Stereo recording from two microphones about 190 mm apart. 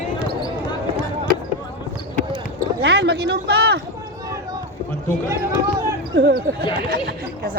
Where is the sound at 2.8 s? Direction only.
60° right (ahead or behind).